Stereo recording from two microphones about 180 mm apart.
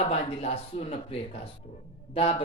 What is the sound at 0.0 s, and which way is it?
Speech, 35° left (ahead or behind).